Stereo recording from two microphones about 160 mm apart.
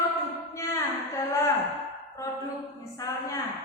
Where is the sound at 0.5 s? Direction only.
20° left (ahead or behind).